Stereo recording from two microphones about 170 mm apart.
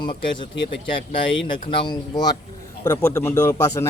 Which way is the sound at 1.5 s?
25° left (ahead or behind).